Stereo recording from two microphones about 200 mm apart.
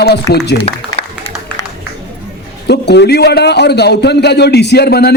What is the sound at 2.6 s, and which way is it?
A man's voice, 55° left (ahead or behind).